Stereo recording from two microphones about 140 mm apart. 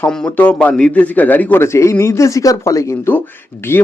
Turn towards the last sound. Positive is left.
turn(degrees=15)  # may be behind; listen again after turning